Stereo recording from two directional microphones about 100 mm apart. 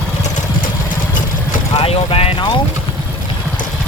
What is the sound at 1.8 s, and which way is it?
Boat, 75° left (ahead or behind).